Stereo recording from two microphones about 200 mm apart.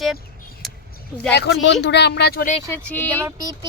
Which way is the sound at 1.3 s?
60° left (ahead or behind).